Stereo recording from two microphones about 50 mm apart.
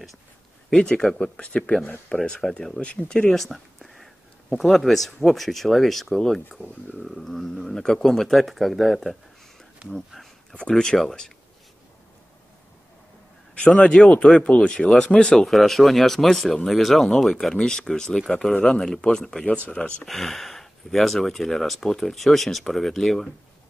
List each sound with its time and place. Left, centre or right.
0.7 s speech: centre
2.8 s speech: left
3.3 s speech: centre
10.7 s speech: centre
13.7 s speech: centre
15.3 s speech: centre